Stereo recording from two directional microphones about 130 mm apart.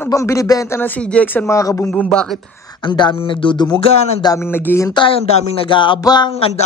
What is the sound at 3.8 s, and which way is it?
Speech, 50° left (ahead or behind).